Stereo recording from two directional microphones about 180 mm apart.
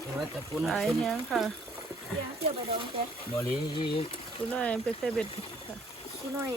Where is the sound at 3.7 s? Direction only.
30° left (ahead or behind).